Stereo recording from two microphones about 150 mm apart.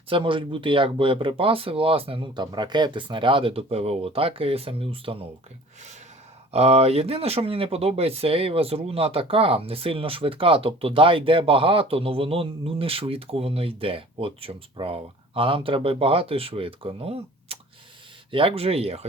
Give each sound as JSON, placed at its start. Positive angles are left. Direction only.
{"t": 0.1, "sound": "speech", "side_deg": -35}
{"t": 6.5, "sound": "speech", "side_deg": -45}